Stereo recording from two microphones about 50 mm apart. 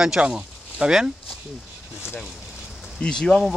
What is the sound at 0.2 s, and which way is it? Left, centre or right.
Speech, centre.